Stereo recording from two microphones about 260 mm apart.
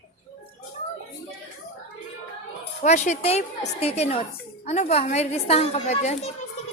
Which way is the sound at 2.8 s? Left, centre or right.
Left.